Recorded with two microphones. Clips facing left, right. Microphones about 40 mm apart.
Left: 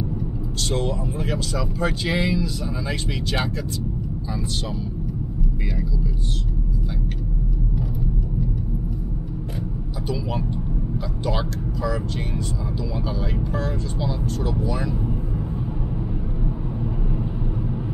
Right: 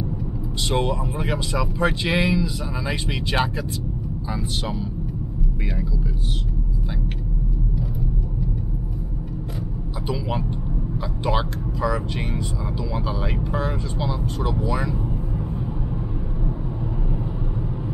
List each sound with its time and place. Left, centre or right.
0.7 s speech: right
11.2 s speech: right
13.5 s speech: right